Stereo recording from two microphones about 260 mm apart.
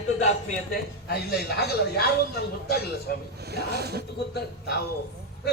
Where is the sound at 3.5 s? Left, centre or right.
Right.